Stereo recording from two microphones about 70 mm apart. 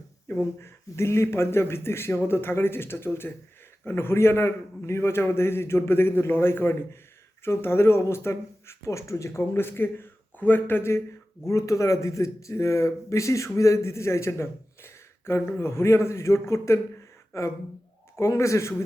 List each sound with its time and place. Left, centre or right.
0.3 s speech: left
11.4 s speech: left